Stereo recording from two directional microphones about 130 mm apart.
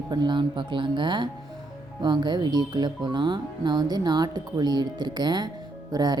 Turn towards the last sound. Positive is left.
turn(degrees=-30)  # may be behind; listen again after turning